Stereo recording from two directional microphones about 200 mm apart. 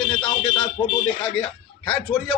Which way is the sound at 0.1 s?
20° left (ahead or behind).